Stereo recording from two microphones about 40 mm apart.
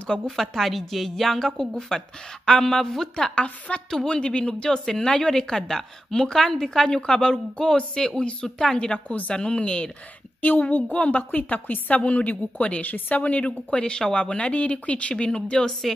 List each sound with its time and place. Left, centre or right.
0.4 s a woman's voice: centre
3.3 s a woman's voice: left
3.9 s a woman's voice: left
10.4 s a woman's voice: left
10.8 s a woman's voice: left
12.8 s a woman's voice: left
13.4 s speech: left